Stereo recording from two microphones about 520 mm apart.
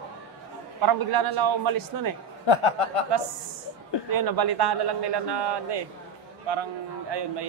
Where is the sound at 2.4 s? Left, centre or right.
Left.